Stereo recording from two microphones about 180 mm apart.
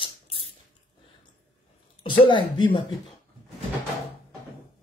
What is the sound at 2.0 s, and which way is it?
Speech, 30° left (ahead or behind).